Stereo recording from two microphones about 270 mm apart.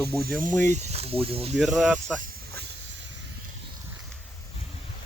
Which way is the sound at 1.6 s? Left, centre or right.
Centre.